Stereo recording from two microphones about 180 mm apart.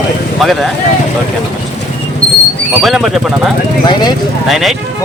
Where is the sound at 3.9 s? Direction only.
25° left (ahead or behind).